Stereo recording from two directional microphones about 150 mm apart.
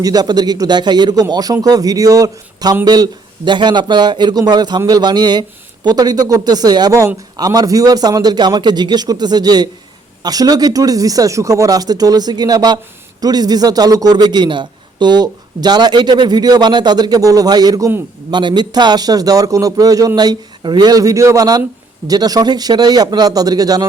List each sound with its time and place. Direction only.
0.0 s a man's voice: 25° right (ahead or behind)